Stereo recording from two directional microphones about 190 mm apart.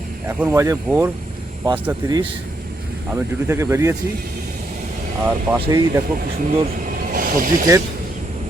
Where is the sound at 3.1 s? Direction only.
15° right (ahead or behind).